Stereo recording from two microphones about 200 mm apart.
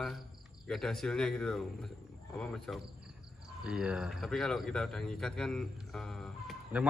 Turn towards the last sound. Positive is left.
turn(degrees=0)  # may be behind; listen again after turning